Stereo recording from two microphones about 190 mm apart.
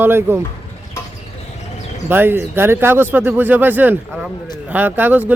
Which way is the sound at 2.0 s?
10° right (ahead or behind).